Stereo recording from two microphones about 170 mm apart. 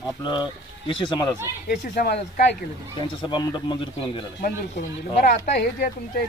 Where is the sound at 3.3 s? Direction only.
25° left (ahead or behind).